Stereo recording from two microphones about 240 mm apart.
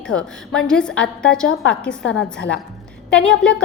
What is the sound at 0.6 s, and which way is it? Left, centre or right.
Speech, centre.